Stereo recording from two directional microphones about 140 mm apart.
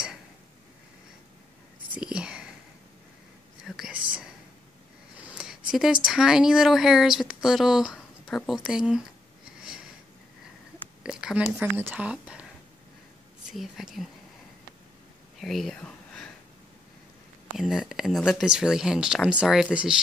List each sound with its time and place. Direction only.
2.0 s whispering: 5° right (ahead or behind)
3.6 s whispering: centre (ahead or behind)
5.2 s a sound: 5° right (ahead or behind)
5.7 s speech: 5° right (ahead or behind)
11.0 s a sound: 5° right (ahead or behind)
11.5 s speech: 10° right (ahead or behind)
13.5 s speech: centre (ahead or behind)
15.3 s a sound: centre (ahead or behind)
17.6 s speech: centre (ahead or behind)